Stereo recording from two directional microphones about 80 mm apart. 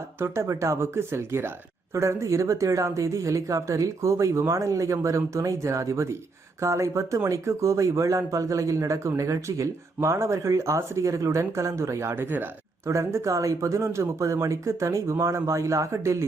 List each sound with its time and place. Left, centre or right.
0.2 s speech: right